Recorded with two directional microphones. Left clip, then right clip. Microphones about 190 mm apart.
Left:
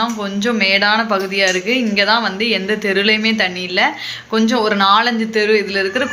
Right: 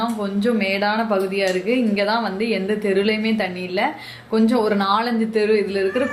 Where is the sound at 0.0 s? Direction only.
Centre (ahead or behind).